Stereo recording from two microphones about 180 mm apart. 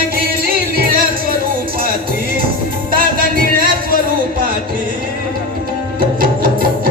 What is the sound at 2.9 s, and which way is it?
Music, 50° right (ahead or behind).